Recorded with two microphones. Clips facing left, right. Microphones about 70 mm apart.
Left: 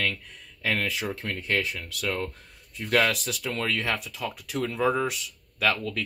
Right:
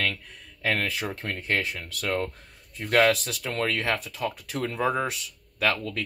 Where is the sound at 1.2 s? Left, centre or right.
Right.